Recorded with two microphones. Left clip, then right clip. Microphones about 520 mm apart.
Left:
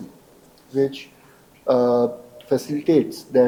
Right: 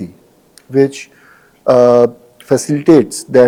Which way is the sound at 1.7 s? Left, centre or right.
Right.